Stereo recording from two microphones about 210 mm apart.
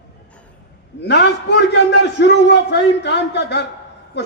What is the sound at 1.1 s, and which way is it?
A man's voice, 55° left (ahead or behind).